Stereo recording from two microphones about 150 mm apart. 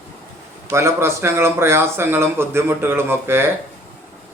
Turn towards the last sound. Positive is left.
turn(degrees=-15)  # may be behind; listen again after turning